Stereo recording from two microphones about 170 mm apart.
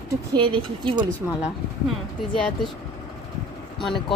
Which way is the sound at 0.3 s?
30° right (ahead or behind).